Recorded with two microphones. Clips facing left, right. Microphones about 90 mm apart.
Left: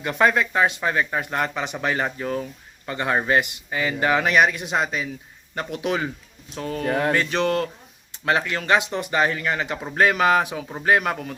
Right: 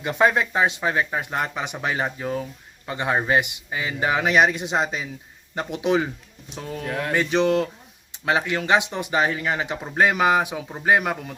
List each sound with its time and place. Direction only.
0.0 s speech: 20° right (ahead or behind)
6.8 s speech: 35° left (ahead or behind)
7.1 s speech: 15° right (ahead or behind)